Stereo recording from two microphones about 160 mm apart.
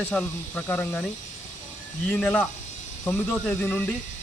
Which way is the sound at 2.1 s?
10° left (ahead or behind).